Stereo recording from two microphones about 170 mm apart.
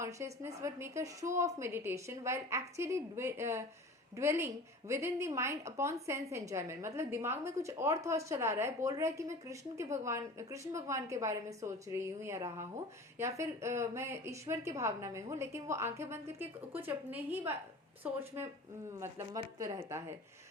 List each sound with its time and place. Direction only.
0.0 s a woman's voice: 15° right (ahead or behind)
18.9 s a woman's voice: 15° right (ahead or behind)